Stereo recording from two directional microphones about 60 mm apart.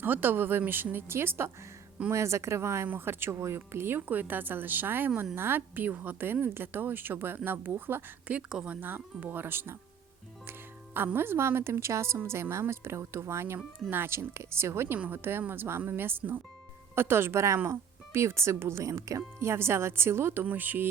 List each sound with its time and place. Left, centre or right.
0.0 s speech: right
2.0 s a woman's voice: right
8.3 s speech: centre
8.8 s speech: right
10.9 s a woman's voice: right
19.5 s a woman's voice: right
20.4 s speech: right